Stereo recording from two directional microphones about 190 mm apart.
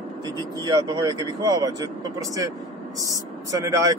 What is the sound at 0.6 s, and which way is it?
A man's voice, 20° right (ahead or behind).